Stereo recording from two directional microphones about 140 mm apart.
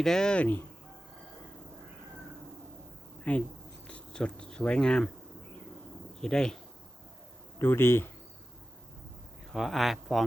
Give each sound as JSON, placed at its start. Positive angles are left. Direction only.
{"t": 0.0, "sound": "speech", "side_deg": 5}
{"t": 3.3, "sound": "speech", "side_deg": 10}
{"t": 6.1, "sound": "speech", "side_deg": 5}
{"t": 7.6, "sound": "speech", "side_deg": 15}
{"t": 9.5, "sound": "speech", "side_deg": 0}